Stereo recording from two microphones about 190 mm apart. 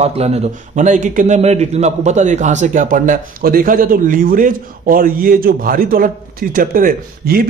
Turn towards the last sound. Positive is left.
turn(degrees=-50)  # may be behind; listen again after turning